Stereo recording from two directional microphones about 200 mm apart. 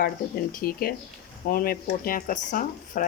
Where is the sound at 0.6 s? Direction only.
45° left (ahead or behind).